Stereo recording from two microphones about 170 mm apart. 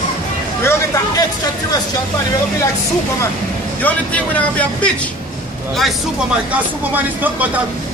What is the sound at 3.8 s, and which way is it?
Speech, 10° left (ahead or behind).